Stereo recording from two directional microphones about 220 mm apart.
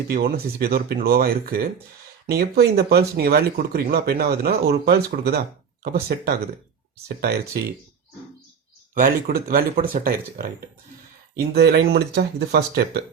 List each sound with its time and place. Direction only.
0.1 s speech: 45° right (ahead or behind)
9.0 s speech: 40° right (ahead or behind)